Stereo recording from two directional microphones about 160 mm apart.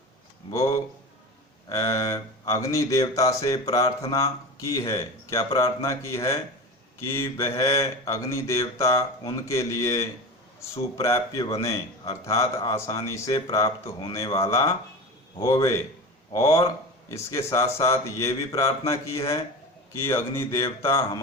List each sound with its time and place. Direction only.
0.5 s speech: 20° left (ahead or behind)
11.0 s speech: 20° left (ahead or behind)